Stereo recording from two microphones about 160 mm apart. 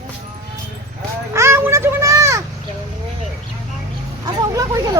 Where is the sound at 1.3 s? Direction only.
15° right (ahead or behind).